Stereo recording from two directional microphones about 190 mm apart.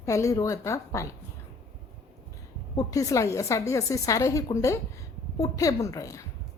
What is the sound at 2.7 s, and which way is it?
A woman's voice, 15° left (ahead or behind).